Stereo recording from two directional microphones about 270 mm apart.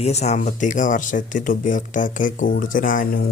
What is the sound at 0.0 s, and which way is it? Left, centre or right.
Speech, left.